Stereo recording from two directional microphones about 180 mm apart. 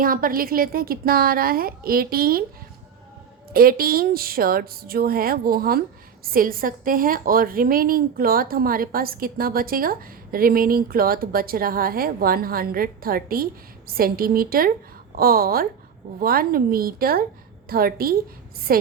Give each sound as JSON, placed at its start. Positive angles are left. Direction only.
{"t": 0.0, "sound": "a woman's voice", "side_deg": -50}
{"t": 3.5, "sound": "a woman's voice", "side_deg": -55}